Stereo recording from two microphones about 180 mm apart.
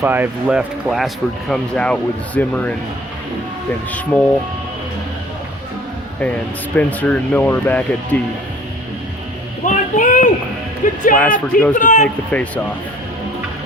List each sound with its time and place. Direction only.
0.0 s speech: 10° right (ahead or behind); by 2.7 s 5° left (ahead or behind)
3.9 s speech: 10° left (ahead or behind)
6.1 s speech: 5° left (ahead or behind)
9.6 s a sound: 45° left (ahead or behind)
10.8 s speech: 45° left (ahead or behind)
11.2 s speech: 10° left (ahead or behind)
11.7 s speech: 45° left (ahead or behind)